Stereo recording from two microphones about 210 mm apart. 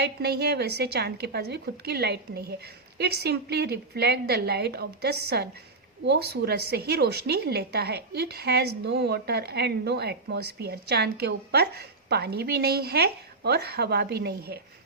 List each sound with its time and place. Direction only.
0.0 s a woman's voice: 50° right (ahead or behind)